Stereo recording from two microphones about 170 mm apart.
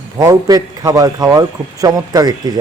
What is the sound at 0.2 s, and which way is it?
A man's voice, 20° right (ahead or behind).